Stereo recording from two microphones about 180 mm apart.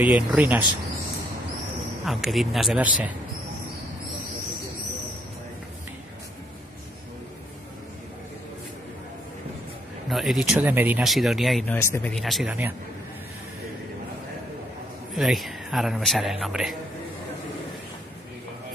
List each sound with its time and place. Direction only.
0.0 s speech: 5° right (ahead or behind)
2.0 s speech: centre (ahead or behind)
10.0 s speech: centre (ahead or behind)
11.7 s speech: 10° left (ahead or behind)
12.1 s speech: centre (ahead or behind)
15.1 s speech: centre (ahead or behind)